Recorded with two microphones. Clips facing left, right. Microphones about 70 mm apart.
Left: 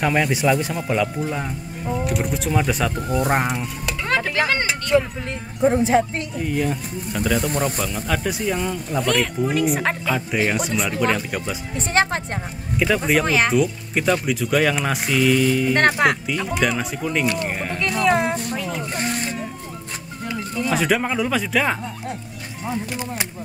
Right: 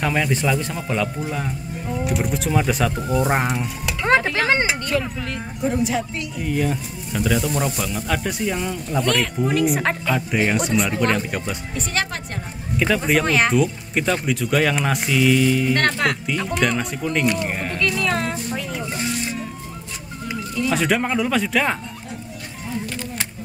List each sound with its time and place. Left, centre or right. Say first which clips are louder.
0.0 s speech: left 2 dB; centre
4.0 s a sound: right 3 dB; right
4.9 s speech: left 4 dB; left
6.4 s speech: right 1 dB; centre
11.7 s a woman's voice: left 7 dB; left
12.7 s speech: even; centre
15.7 s a woman's voice: left 3 dB; centre
16.3 s speech: even; centre
18.0 s a sound: left 9 dB; centre
18.5 s music: left 1 dB; centre
18.9 s music: even; left
20.7 s speech: even; centre
22.8 s music: left 2 dB; centre